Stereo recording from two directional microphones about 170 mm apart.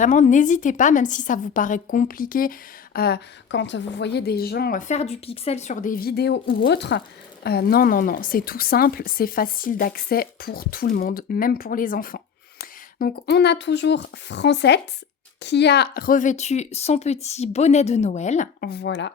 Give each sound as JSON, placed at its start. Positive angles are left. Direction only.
{"t": 0.0, "sound": "a woman's voice", "side_deg": 45}
{"t": 7.4, "sound": "a woman's voice", "side_deg": 70}
{"t": 18.6, "sound": "speech", "side_deg": 75}